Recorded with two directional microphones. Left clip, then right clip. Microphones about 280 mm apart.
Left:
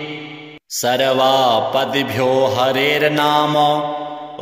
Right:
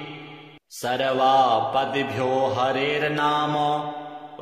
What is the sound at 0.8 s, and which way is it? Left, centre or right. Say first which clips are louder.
A man's voice: left 6 dB; left.